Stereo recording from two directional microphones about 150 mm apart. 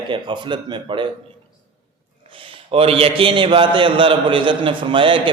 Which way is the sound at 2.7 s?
40° right (ahead or behind).